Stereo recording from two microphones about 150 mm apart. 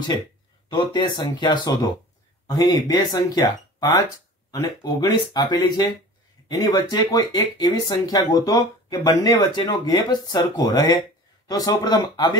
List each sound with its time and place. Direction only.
0.7 s speech: 30° left (ahead or behind)
4.5 s speech: 25° left (ahead or behind)